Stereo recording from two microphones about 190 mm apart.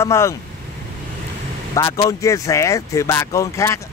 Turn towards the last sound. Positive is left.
turn(degrees=15)  # may be behind; listen again after turning